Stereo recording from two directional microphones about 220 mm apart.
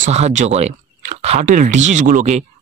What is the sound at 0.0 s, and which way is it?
Speech, 30° right (ahead or behind).